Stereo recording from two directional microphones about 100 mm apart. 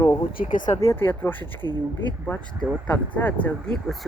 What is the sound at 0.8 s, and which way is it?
Speech, 25° left (ahead or behind).